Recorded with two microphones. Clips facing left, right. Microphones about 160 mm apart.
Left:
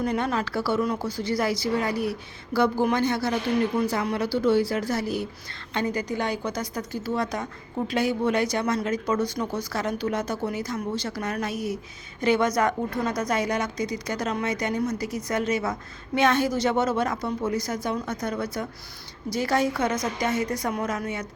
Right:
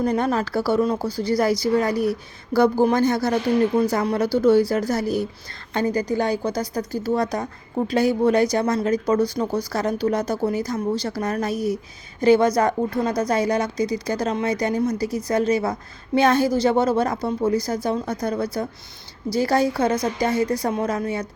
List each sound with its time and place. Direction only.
0.0 s speech: 35° right (ahead or behind)